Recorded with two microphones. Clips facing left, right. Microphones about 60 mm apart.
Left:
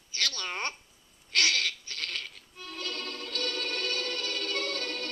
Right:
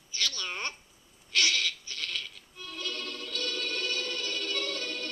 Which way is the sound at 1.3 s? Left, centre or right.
Left.